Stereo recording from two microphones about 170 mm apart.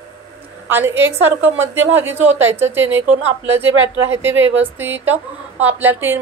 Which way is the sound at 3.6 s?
90° right.